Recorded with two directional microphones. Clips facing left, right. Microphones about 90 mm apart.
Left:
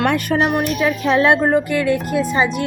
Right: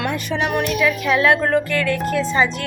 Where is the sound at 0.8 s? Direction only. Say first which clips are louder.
Left 2 dB; 30° left (ahead or behind).